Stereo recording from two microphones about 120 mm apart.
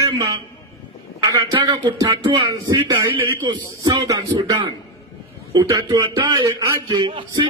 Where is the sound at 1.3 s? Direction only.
35° right (ahead or behind).